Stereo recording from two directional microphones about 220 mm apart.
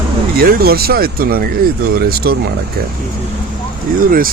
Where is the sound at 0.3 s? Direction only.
40° right (ahead or behind).